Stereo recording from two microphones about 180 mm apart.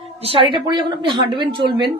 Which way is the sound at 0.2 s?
30° right (ahead or behind).